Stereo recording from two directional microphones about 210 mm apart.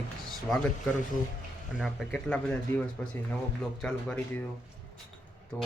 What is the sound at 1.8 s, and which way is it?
Speech, centre (ahead or behind).